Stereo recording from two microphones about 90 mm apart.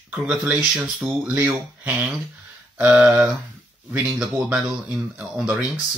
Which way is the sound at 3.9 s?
5° right (ahead or behind).